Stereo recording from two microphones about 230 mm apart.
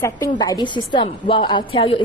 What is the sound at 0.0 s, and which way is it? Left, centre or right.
A woman's voice, centre.